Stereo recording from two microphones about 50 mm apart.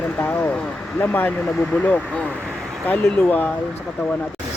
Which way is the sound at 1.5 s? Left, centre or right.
Left.